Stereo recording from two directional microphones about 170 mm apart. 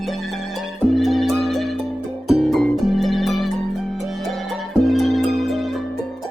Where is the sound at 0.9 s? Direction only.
Centre (ahead or behind).